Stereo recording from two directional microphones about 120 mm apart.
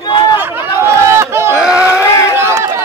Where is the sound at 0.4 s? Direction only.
20° right (ahead or behind).